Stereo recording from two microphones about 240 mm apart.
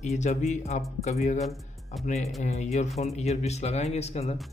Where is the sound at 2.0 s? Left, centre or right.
Left.